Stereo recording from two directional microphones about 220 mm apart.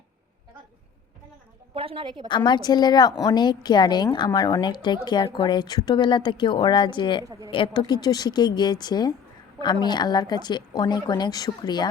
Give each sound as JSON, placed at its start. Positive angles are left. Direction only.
{"t": 1.7, "sound": "a woman's voice", "side_deg": -25}
{"t": 2.2, "sound": "speech", "side_deg": 20}
{"t": 7.3, "sound": "a woman's voice", "side_deg": -15}
{"t": 7.5, "sound": "speech", "side_deg": 20}